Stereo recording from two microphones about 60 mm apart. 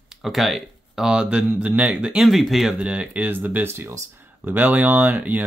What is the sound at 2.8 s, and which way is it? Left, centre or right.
Speech, centre.